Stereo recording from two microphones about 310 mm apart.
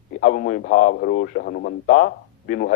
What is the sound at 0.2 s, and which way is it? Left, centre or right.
A man's voice, left.